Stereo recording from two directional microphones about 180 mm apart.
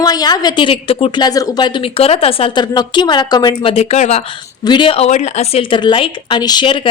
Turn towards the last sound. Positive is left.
turn(degrees=25)  # may be behind; listen again after turning